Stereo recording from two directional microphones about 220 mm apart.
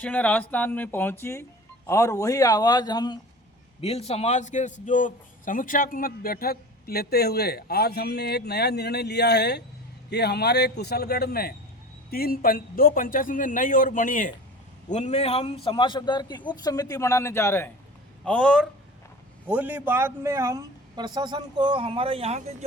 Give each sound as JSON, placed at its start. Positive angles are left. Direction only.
{"t": 0.0, "sound": "a man's voice", "side_deg": 5}
{"t": 19.5, "sound": "a man's voice", "side_deg": -5}